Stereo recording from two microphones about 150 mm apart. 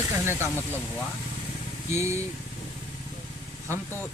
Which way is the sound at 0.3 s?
15° right (ahead or behind).